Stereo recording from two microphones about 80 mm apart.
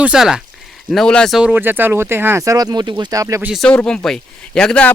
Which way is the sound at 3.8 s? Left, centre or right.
Centre.